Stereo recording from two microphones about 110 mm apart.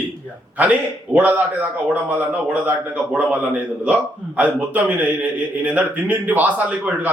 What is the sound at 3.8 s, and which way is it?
A man's voice, 15° right (ahead or behind).